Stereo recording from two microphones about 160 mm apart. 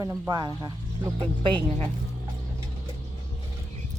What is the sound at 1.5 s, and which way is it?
Speech, 40° right (ahead or behind).